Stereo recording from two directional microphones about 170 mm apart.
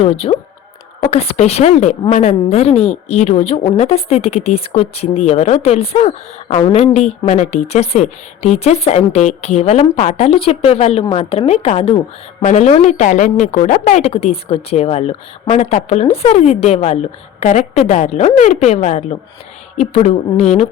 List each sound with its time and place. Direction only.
0.0 s a woman's voice: 35° left (ahead or behind)